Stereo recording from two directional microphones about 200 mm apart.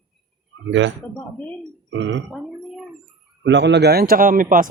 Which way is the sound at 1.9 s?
65° right (ahead or behind).